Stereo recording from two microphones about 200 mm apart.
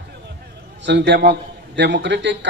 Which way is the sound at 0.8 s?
60° right (ahead or behind).